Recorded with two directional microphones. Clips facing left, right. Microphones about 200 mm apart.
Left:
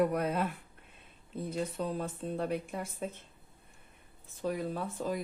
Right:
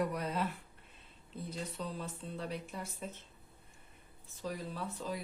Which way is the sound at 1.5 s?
50° left (ahead or behind).